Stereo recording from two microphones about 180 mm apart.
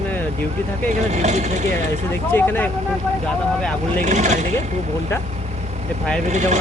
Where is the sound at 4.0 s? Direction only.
40° right (ahead or behind).